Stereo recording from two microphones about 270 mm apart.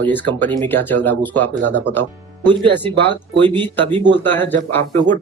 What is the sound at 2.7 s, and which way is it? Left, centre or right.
A man's voice, centre.